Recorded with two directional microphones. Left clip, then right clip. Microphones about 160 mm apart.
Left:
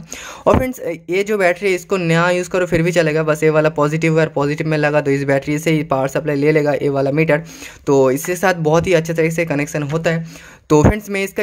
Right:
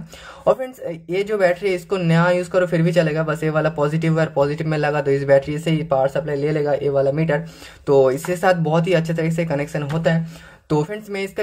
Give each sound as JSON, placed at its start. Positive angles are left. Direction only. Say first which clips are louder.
{"t": 0.4, "sound": "speech", "louder": "left 4 dB", "side_deg": 40}